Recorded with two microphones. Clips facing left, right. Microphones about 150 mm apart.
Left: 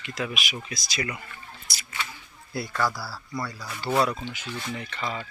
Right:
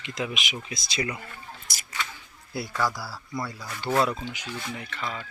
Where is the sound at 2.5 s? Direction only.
10° right (ahead or behind).